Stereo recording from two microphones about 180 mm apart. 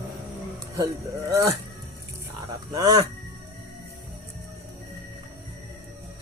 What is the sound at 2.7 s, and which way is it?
Speech, 20° right (ahead or behind).